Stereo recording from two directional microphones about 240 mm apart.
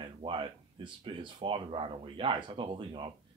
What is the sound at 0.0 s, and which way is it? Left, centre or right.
Speech, centre.